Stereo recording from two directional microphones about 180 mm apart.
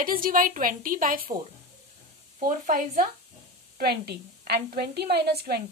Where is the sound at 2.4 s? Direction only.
50° right (ahead or behind).